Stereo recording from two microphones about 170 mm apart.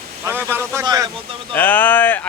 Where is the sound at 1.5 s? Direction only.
10° left (ahead or behind).